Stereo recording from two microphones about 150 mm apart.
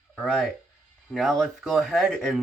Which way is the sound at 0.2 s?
5° left (ahead or behind).